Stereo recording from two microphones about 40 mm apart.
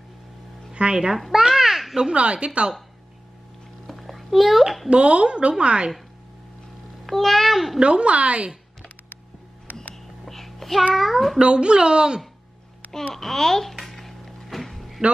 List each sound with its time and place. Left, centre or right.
0.9 s a child's voice: centre
1.3 s babbling: centre
2.1 s a woman's voice: right
3.8 s a sound: centre
4.8 s a woman's voice: right
7.1 s a child's voice: centre
7.8 s a woman's voice: right
10.2 s child singing: centre
11.0 s a child's voice: centre
11.5 s a woman's voice: right
13.1 s music: centre